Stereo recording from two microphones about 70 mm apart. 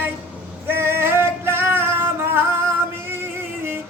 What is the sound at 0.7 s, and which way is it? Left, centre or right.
Music, right.